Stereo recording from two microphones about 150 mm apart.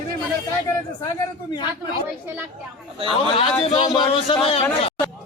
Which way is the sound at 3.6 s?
40° left (ahead or behind).